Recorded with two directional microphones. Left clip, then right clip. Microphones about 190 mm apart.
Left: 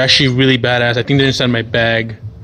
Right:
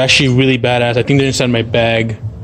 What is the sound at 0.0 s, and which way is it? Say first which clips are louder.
Speech: even; 5° right (ahead or behind).